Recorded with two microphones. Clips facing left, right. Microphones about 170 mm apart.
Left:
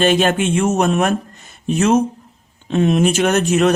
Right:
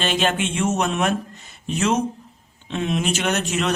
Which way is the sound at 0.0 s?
50° left (ahead or behind).